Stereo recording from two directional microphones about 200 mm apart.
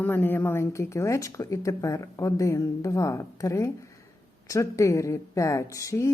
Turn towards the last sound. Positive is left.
turn(degrees=15)  # may be behind; listen again after turning